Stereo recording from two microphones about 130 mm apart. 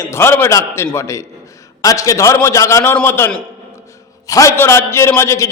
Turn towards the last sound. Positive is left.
turn(degrees=20)  # may be behind; listen again after turning